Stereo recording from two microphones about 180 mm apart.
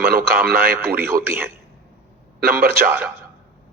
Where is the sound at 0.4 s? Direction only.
55° right (ahead or behind).